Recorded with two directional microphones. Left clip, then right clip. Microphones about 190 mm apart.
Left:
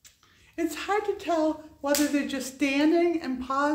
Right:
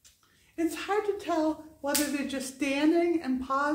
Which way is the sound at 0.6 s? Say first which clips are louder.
Left 2 dB; 20° left (ahead or behind).